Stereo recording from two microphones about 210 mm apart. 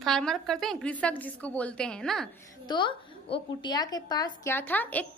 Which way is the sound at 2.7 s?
20° left (ahead or behind).